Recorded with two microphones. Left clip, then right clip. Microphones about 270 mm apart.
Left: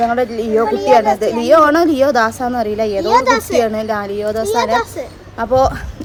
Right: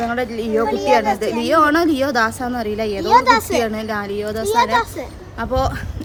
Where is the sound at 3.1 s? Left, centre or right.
Centre.